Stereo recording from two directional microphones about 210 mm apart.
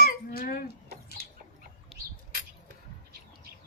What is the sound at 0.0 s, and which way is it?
Cough, 45° left (ahead or behind).